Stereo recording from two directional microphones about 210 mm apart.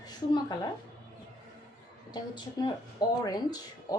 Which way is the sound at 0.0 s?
20° left (ahead or behind).